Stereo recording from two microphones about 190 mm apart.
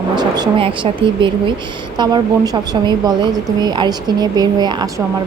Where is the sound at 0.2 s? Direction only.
25° right (ahead or behind).